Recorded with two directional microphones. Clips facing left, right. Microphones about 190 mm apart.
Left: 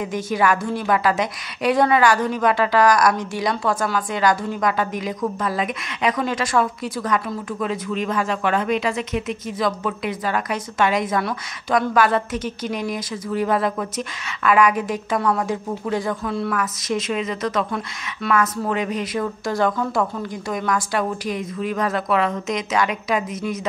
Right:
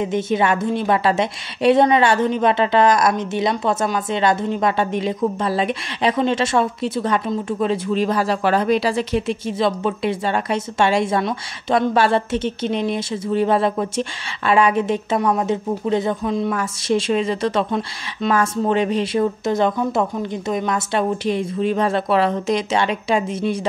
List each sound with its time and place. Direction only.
0.0 s a woman's voice: 25° right (ahead or behind)